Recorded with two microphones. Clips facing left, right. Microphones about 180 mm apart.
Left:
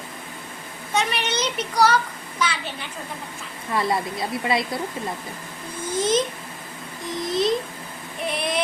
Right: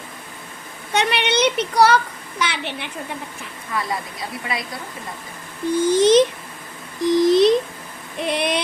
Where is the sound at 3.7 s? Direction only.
25° left (ahead or behind).